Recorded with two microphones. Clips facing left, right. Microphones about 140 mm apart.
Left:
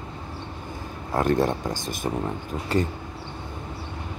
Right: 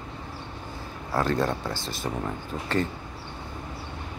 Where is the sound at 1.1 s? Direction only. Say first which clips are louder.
Left 3 dB; 20° left (ahead or behind).